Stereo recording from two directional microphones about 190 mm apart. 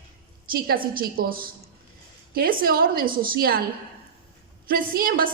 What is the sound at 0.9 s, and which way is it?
A woman's voice, 50° right (ahead or behind).